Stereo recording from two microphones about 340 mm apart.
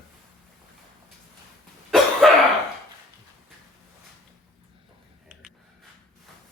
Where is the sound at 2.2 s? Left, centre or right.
Centre.